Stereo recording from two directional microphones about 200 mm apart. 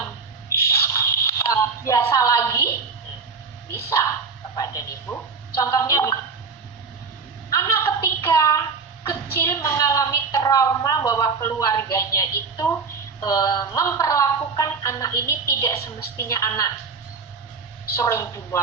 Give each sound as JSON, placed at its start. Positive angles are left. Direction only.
{"t": 0.6, "sound": "a sound", "side_deg": 15}
{"t": 3.8, "sound": "dog", "side_deg": 15}
{"t": 4.5, "sound": "speech", "side_deg": 15}
{"t": 7.5, "sound": "a sound", "side_deg": 15}
{"t": 9.0, "sound": "a woman's voice", "side_deg": 15}
{"t": 17.9, "sound": "speech", "side_deg": 15}